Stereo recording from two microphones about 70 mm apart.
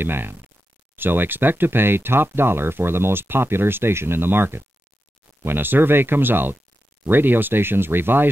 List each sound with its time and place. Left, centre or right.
0.0 s speech: right